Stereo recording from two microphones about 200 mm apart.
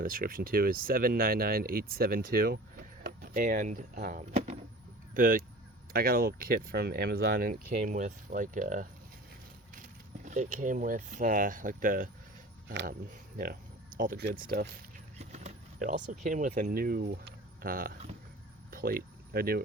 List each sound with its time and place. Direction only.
0.0 s speech: 45° right (ahead or behind)
5.1 s speech: 45° right (ahead or behind)
10.2 s speech: 35° right (ahead or behind)
12.6 s speech: 55° right (ahead or behind)
14.3 s speech: 55° right (ahead or behind)
15.2 s a sound: 35° right (ahead or behind)
16.2 s speech: 40° right (ahead or behind)